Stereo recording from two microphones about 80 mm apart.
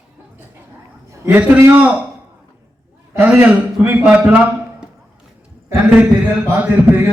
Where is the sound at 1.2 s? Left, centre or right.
Centre.